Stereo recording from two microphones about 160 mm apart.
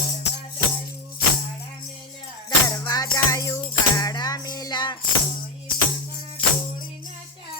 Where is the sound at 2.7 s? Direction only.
25° left (ahead or behind).